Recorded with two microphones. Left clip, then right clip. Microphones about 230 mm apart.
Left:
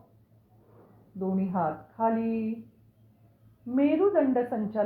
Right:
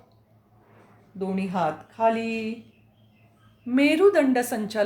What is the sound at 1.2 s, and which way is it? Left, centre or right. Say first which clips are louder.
Speech: right 3 dB; right.